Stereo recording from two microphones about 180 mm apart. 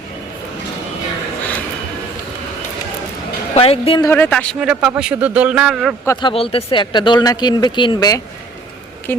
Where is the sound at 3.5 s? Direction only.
30° left (ahead or behind).